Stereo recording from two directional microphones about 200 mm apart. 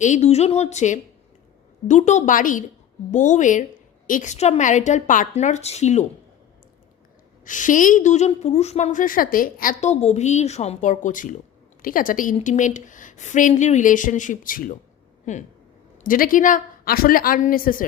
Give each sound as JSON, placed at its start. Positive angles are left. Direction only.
{"t": 0.0, "sound": "a woman's voice", "side_deg": 35}
{"t": 7.4, "sound": "a woman's voice", "side_deg": 40}